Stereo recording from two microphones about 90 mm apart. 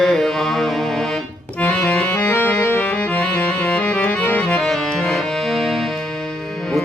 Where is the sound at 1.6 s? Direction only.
10° left (ahead or behind).